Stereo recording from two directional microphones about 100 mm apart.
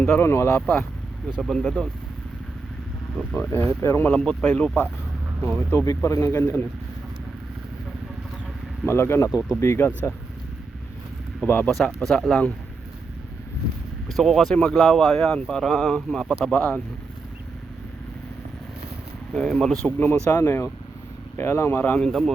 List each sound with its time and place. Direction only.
0.2 s speech: 25° left (ahead or behind)
0.6 s speech: 10° left (ahead or behind)
3.3 s speech: 25° left (ahead or behind)
4.2 s speech: 5° left (ahead or behind)
5.4 s a man's voice: 20° left (ahead or behind)
8.9 s speech: 25° left (ahead or behind)
11.4 s speech: 20° left (ahead or behind)
11.7 s speech: centre (ahead or behind)
14.1 s speech: centre (ahead or behind)
19.3 s speech: 5° left (ahead or behind)
20.0 s speech: 20° left (ahead or behind)
21.9 s speech: 5° left (ahead or behind)